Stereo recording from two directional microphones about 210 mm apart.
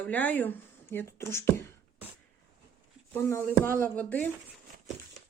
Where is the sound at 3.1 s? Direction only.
10° left (ahead or behind).